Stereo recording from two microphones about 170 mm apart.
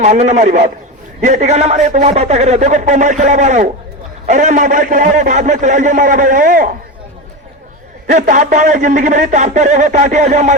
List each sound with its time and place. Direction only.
0.0 s a man's voice: 45° right (ahead or behind)
8.0 s a man's voice: 50° right (ahead or behind)